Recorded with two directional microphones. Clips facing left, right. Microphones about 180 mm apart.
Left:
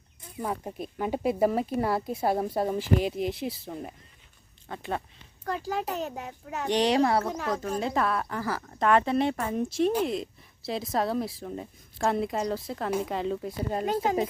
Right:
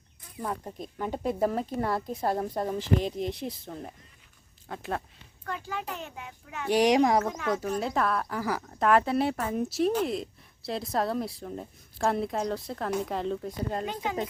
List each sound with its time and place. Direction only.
0.4 s speech: 10° left (ahead or behind)
5.5 s a child's voice: 40° left (ahead or behind)
6.7 s speech: 10° right (ahead or behind)
7.8 s speech: centre (ahead or behind)
8.4 s speech: 15° right (ahead or behind)
8.6 s speech: centre (ahead or behind)
13.8 s a child's voice: 40° left (ahead or behind)